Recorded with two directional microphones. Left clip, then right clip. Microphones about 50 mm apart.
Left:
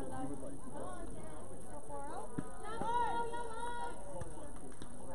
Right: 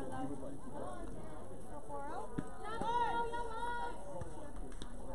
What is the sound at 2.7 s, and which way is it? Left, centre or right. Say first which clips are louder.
Music: even; right.